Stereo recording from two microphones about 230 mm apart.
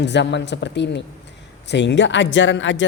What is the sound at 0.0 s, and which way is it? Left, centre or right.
A woman's voice, left.